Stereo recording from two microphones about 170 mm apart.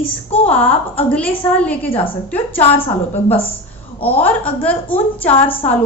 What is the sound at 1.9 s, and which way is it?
Speech, 30° left (ahead or behind).